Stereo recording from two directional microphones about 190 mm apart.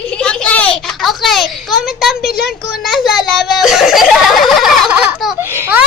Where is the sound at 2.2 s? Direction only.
55° left (ahead or behind).